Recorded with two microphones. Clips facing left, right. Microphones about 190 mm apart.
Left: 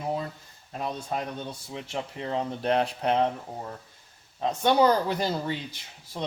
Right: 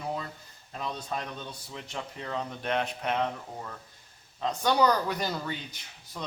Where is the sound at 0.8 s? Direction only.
30° left (ahead or behind).